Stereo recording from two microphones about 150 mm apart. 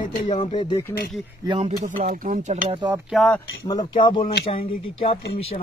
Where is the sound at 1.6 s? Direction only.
50° right (ahead or behind).